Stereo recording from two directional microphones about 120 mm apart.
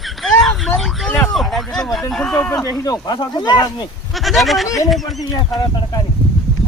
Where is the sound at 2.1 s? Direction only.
5° left (ahead or behind).